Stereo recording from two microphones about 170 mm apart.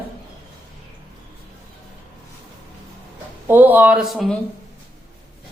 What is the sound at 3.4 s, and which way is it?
Speech, 10° right (ahead or behind).